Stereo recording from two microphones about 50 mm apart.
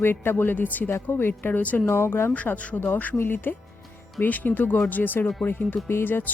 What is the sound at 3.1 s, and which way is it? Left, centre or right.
Speech, left.